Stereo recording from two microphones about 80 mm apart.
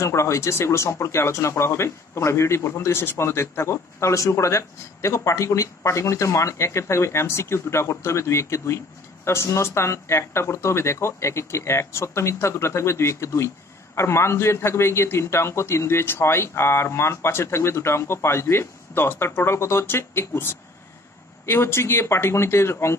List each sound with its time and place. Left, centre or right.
0.0 s speech: left